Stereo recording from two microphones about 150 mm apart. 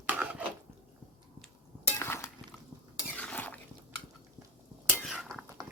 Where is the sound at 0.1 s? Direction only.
10° right (ahead or behind).